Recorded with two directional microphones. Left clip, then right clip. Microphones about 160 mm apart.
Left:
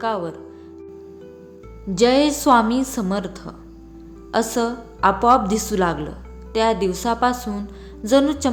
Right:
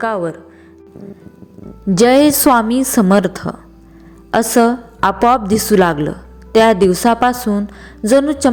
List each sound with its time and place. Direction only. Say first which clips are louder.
0.0 s speech: right 6 dB; 25° right (ahead or behind)
2.0 s a woman's voice: right 6 dB; 50° right (ahead or behind); by 8.4 s 35° right (ahead or behind)